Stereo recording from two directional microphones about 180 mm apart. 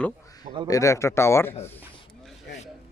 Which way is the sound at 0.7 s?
15° left (ahead or behind).